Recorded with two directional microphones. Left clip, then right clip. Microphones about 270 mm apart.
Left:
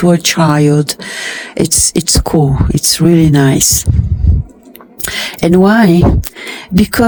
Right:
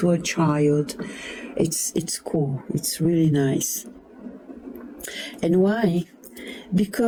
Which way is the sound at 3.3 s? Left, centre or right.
Left.